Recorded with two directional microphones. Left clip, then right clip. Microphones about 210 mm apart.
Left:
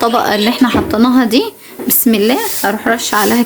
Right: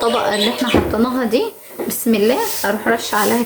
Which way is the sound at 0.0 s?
40° left (ahead or behind).